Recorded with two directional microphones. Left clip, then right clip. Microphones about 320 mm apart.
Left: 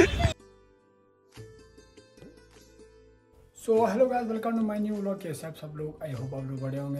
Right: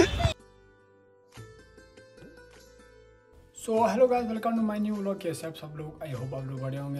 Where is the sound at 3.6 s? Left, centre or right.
Centre.